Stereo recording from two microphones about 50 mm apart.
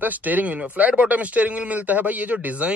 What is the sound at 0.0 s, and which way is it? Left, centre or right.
Speech, right.